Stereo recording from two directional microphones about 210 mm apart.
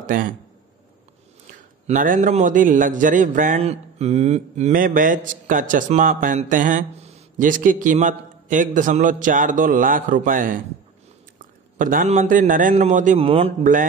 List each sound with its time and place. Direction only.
0.0 s speech: 40° right (ahead or behind)
1.9 s a man's voice: 40° right (ahead or behind)